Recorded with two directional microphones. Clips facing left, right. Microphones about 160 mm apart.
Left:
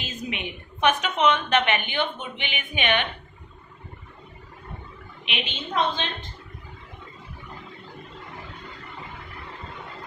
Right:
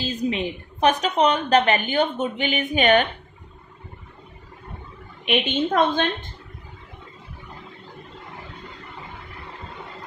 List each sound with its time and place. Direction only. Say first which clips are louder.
0.0 s a woman's voice: right 8 dB; 35° right (ahead or behind)
5.2 s a woman's voice: right 12 dB; 50° right (ahead or behind)